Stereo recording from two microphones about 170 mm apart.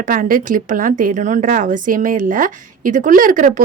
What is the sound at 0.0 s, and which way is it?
Speech, 55° right (ahead or behind).